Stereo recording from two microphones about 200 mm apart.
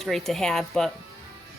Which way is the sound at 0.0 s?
Centre (ahead or behind).